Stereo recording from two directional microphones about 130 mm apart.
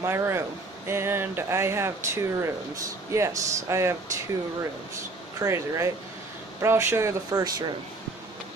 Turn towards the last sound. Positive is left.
turn(degrees=-30)  # may be behind; listen again after turning